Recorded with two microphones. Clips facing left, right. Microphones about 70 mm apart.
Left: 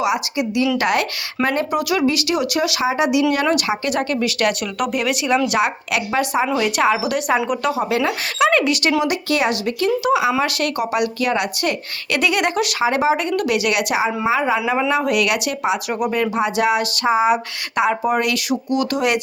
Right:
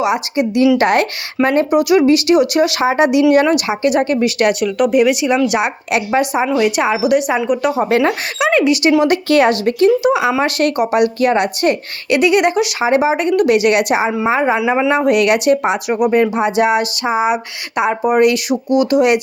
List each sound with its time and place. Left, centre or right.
0.0 s speech: right
1.4 s speech: centre
1.7 s speech: centre
2.0 s speech: right
2.8 s speech: right
3.4 s speech: centre
4.6 s speech: centre
4.9 s speech: centre
7.7 s speech: right
8.4 s speech: centre
9.0 s speech: right
9.8 s speech: right
12.1 s speech: centre
15.9 s speech: centre